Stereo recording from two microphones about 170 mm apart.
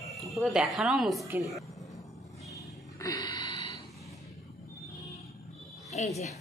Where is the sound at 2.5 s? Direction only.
20° left (ahead or behind).